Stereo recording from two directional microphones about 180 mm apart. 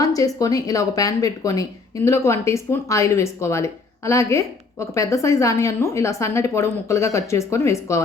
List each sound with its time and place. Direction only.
0.0 s speech: 20° left (ahead or behind)